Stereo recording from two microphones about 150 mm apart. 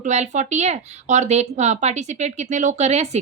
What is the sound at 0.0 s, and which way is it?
Speech, 50° right (ahead or behind).